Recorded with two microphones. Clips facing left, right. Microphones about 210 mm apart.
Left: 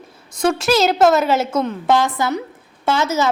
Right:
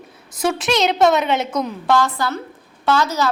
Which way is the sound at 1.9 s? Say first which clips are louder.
Even; 20° left (ahead or behind).